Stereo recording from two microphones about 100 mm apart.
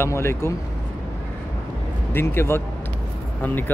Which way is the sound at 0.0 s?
25° left (ahead or behind).